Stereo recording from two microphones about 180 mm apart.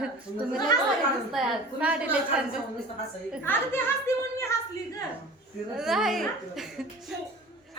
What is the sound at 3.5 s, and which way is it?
Speech, 10° left (ahead or behind).